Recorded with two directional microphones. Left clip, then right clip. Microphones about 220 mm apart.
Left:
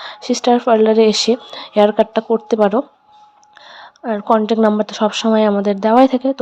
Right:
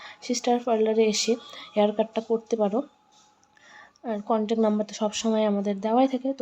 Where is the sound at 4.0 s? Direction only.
20° left (ahead or behind).